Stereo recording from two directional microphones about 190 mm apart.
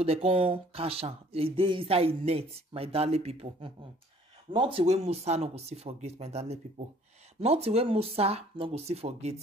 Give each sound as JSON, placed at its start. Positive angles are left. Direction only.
{"t": 0.0, "sound": "speech", "side_deg": -30}